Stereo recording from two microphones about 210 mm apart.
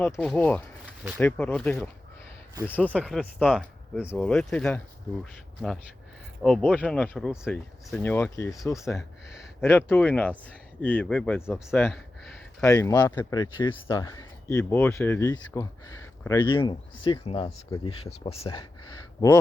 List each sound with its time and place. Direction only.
0.0 s speech: 5° left (ahead or behind)
6.4 s speech: 5° left (ahead or behind)
8.8 s speech: centre (ahead or behind)
9.6 s speech: 10° left (ahead or behind)
11.9 s a sound: centre (ahead or behind)
12.6 s speech: 15° left (ahead or behind)